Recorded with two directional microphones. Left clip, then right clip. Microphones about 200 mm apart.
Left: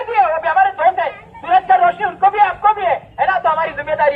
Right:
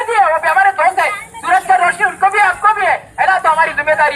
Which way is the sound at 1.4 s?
30° right (ahead or behind).